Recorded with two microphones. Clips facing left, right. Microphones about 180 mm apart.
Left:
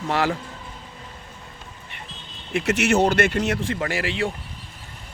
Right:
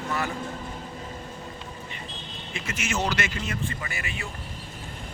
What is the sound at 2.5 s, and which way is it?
A man's voice, 65° left (ahead or behind).